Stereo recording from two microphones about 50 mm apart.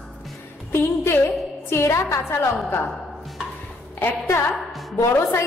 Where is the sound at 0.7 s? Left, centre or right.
Left.